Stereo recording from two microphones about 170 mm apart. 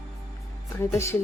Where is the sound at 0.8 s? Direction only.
15° left (ahead or behind).